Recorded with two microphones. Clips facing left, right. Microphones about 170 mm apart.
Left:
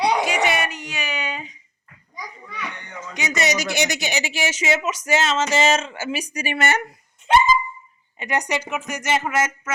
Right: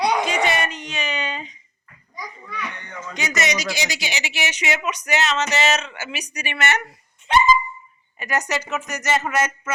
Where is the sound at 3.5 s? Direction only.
50° left (ahead or behind).